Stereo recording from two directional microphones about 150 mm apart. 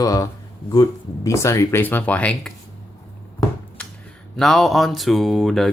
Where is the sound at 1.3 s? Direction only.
20° left (ahead or behind).